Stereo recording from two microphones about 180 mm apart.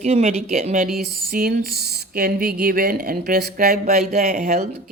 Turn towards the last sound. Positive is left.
turn(degrees=-35)  # may be behind; listen again after turning